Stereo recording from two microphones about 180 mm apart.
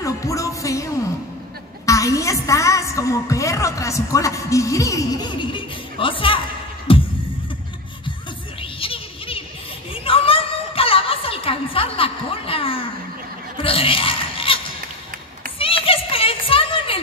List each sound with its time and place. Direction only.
0.0 s music: 20° left (ahead or behind)
1.9 s a woman's voice: 20° left (ahead or behind)
6.9 s music: 30° left (ahead or behind)
8.7 s music: 30° left (ahead or behind)
13.6 s a sound: 30° left (ahead or behind)
15.6 s children playing: 30° left (ahead or behind)